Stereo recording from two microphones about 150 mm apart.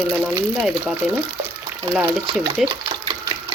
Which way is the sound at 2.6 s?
30° right (ahead or behind).